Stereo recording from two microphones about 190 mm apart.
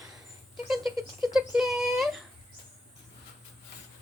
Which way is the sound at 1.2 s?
Centre (ahead or behind).